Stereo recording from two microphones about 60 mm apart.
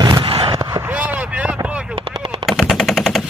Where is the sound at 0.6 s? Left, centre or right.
Right.